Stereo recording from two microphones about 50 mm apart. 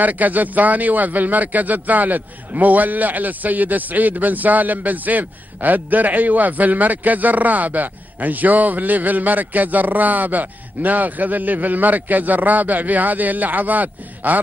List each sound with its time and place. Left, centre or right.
0.0 s a man's voice: right